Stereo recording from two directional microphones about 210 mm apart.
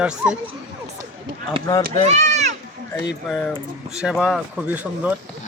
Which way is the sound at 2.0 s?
35° right (ahead or behind).